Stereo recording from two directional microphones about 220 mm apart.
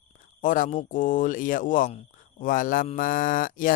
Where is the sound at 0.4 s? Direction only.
35° left (ahead or behind).